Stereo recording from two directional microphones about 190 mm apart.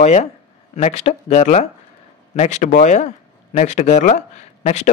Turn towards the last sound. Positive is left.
turn(degrees=35)  # may be behind; listen again after turning